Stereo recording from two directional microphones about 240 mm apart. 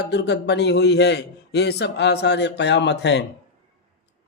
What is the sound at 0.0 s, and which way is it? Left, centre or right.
A man's voice, left.